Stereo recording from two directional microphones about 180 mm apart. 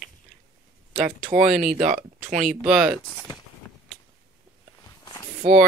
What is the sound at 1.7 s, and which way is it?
Speech, 45° right (ahead or behind).